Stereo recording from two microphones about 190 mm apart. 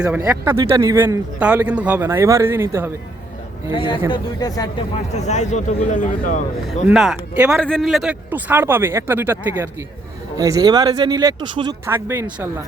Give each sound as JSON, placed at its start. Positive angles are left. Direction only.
{"t": 0.2, "sound": "speech", "side_deg": -15}
{"t": 3.7, "sound": "speech", "side_deg": 25}
{"t": 5.1, "sound": "speech", "side_deg": 35}
{"t": 6.8, "sound": "speech", "side_deg": -5}
{"t": 11.9, "sound": "speech", "side_deg": -10}